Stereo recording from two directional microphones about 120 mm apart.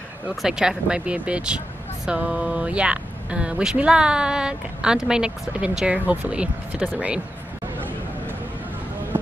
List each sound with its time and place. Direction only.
0.4 s speech: 5° right (ahead or behind)